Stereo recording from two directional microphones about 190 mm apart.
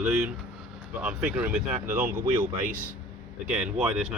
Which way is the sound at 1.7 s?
40° right (ahead or behind).